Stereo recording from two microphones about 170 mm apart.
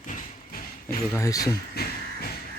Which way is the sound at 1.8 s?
70° left (ahead or behind).